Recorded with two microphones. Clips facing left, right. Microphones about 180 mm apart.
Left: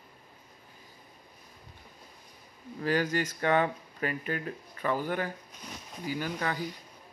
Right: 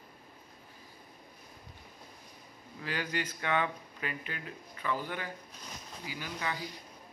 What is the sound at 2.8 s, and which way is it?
A man's voice, 45° left (ahead or behind).